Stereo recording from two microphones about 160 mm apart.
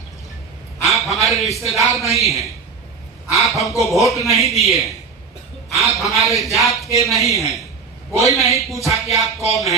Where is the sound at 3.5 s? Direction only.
Centre (ahead or behind).